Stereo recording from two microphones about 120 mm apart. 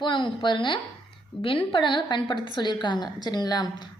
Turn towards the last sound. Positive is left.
turn(degrees=35)  # may be behind; listen again after turning